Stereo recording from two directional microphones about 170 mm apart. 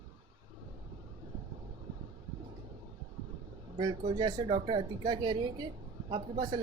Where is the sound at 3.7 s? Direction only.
30° right (ahead or behind).